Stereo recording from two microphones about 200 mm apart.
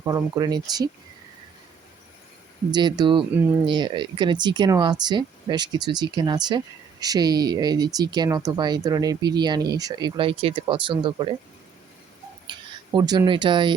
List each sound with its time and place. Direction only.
0.0 s speech: 15° right (ahead or behind)
2.7 s speech: 20° right (ahead or behind)
12.5 s speech: 20° right (ahead or behind)